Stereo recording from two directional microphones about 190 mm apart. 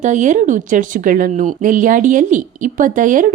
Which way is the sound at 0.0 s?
40° right (ahead or behind).